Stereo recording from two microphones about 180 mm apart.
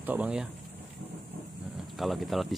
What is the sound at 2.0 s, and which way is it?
Speech, centre (ahead or behind).